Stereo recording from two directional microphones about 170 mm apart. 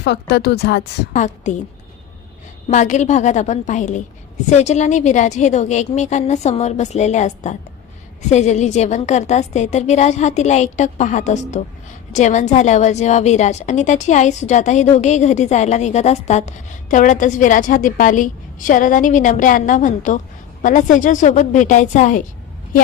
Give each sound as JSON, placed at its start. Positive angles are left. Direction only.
{"t": 0.0, "sound": "a woman's voice", "side_deg": 80}
{"t": 1.1, "sound": "a woman's voice", "side_deg": 45}
{"t": 2.6, "sound": "a woman's voice", "side_deg": 45}